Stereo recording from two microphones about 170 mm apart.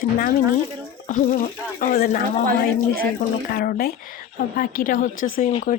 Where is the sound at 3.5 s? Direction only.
60° left (ahead or behind).